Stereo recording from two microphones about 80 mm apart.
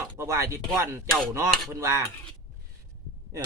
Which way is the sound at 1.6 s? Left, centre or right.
Right.